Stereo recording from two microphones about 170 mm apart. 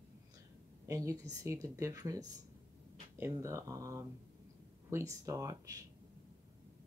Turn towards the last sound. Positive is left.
turn(degrees=-20)  # may be behind; listen again after turning